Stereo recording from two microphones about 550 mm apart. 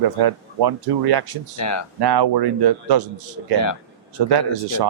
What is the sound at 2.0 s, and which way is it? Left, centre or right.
Speech, right.